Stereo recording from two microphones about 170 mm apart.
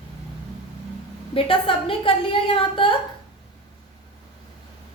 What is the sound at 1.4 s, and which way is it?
A woman's voice, 30° left (ahead or behind).